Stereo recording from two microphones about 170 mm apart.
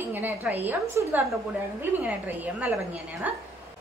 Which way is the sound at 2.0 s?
10° right (ahead or behind).